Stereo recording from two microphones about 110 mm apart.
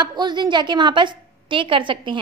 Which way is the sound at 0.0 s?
40° right (ahead or behind).